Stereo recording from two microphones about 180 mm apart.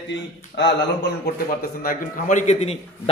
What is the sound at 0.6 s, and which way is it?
Speech, 80° left.